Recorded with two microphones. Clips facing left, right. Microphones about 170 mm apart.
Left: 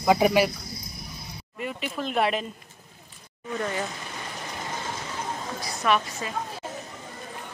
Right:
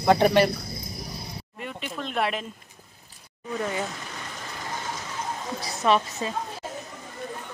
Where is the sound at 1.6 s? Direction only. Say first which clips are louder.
Left 3 dB; 5° left (ahead or behind).